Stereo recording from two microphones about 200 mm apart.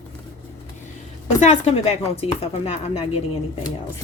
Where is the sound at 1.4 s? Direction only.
30° left (ahead or behind).